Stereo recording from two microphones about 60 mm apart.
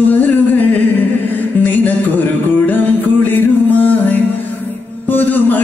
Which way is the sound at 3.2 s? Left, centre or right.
Left.